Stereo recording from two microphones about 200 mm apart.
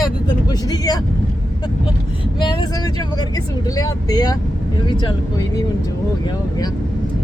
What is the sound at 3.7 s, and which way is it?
Speech, 20° left (ahead or behind).